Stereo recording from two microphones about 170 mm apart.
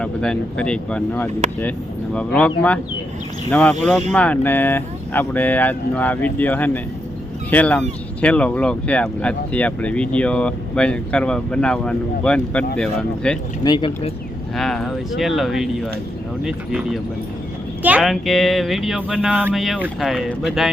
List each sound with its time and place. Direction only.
0.0 s speech: 5° left (ahead or behind)
13.7 s speech: 30° left (ahead or behind)
14.5 s speech: centre (ahead or behind)